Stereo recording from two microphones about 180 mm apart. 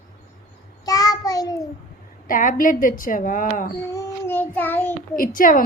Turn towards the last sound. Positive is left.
turn(degrees=50)  # may be behind; listen again after turning